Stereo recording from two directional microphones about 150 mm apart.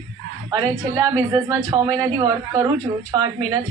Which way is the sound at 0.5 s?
25° right (ahead or behind).